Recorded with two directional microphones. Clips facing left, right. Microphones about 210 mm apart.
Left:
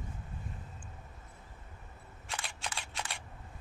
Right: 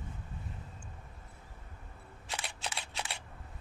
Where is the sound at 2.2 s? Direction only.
10° right (ahead or behind).